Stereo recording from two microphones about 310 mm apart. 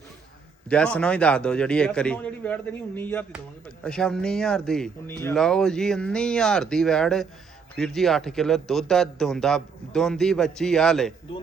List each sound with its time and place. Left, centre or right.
0.7 s speech: centre